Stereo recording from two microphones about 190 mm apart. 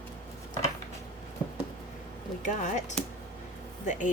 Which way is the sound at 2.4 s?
40° left (ahead or behind).